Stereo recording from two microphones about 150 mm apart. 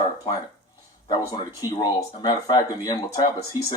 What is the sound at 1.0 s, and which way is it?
Speech, 30° left (ahead or behind).